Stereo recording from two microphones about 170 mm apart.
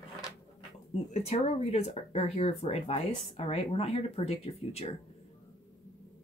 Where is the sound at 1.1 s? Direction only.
40° left (ahead or behind).